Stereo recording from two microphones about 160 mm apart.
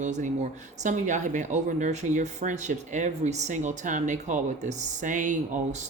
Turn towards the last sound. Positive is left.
turn(degrees=-50)  # may be behind; listen again after turning